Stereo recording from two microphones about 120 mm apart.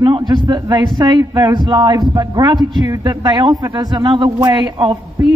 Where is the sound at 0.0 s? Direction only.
40° right (ahead or behind).